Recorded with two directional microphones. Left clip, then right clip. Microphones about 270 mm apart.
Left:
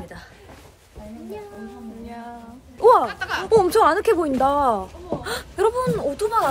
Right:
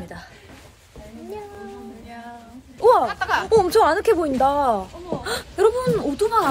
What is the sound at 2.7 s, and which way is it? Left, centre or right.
Speech, centre.